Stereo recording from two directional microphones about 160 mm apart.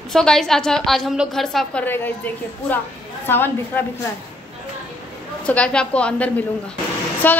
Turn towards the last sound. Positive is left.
turn(degrees=10)  # may be behind; listen again after turning